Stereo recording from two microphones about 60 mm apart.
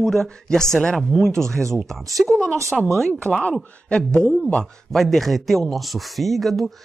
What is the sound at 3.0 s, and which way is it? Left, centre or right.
Speech, centre.